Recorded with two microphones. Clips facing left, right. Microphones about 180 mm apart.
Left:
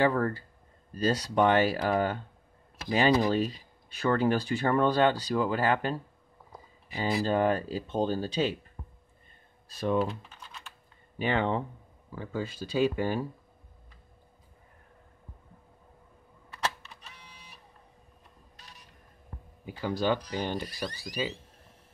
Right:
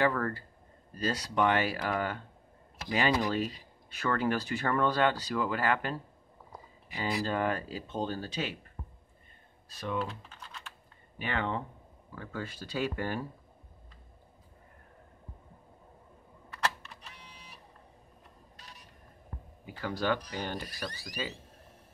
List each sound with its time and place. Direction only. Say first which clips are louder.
0.0 s speech: left 3 dB; 25° left (ahead or behind)
9.7 s speech: left 8 dB; 30° left (ahead or behind)
11.1 s speech: left 6 dB; 30° left (ahead or behind)
12.2 s speech: left 5 dB; 15° left (ahead or behind)
19.6 s speech: left 4 dB; 20° left (ahead or behind)
21.0 s speech: left 7 dB; 10° left (ahead or behind)